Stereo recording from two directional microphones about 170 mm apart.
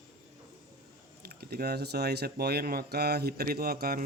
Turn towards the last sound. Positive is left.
turn(degrees=-60)  # may be behind; listen again after turning